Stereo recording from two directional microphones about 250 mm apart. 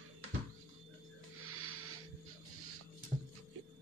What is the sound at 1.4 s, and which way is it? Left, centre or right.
Music, right.